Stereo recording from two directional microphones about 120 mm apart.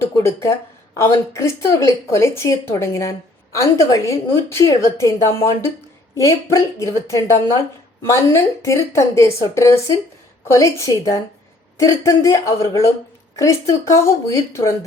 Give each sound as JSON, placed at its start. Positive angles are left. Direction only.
{"t": 0.0, "sound": "a woman's voice", "side_deg": 20}